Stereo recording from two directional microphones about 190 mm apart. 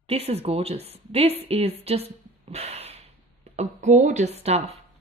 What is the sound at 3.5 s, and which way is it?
Speech, 35° right (ahead or behind).